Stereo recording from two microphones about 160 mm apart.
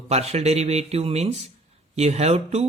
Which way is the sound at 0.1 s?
40° right (ahead or behind).